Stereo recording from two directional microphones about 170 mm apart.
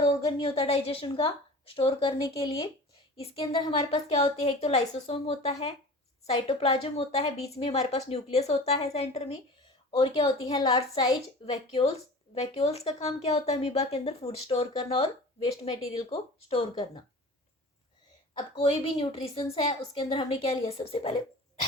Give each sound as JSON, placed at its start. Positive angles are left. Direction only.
{"t": 0.2, "sound": "speech", "side_deg": 25}
{"t": 12.3, "sound": "speech", "side_deg": 35}
{"t": 18.3, "sound": "speech", "side_deg": 30}